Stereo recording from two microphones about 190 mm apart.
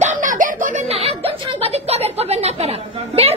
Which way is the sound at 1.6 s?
35° right (ahead or behind).